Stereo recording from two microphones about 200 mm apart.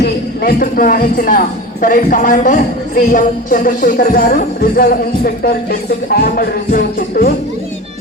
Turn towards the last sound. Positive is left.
turn(degrees=45)  # may be behind; listen again after turning